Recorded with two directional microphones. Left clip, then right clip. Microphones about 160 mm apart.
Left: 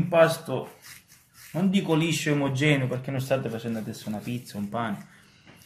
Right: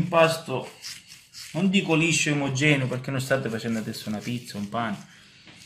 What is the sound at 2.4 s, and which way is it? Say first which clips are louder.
Speech: left 1 dB; 10° left (ahead or behind).